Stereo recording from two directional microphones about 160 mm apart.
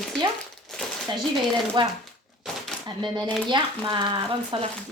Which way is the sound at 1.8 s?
30° right (ahead or behind).